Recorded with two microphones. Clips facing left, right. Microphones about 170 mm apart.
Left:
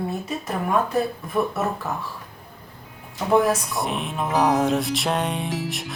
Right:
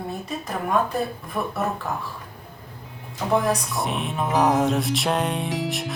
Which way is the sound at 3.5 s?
Centre (ahead or behind).